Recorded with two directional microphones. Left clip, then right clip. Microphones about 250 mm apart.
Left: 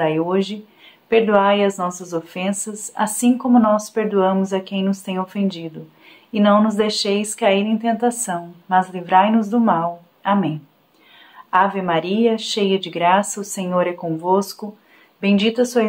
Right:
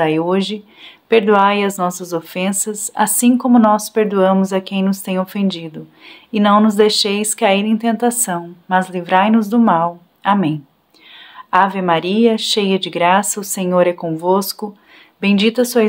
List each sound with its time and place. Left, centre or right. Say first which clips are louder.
0.0 s speech: right 3 dB; right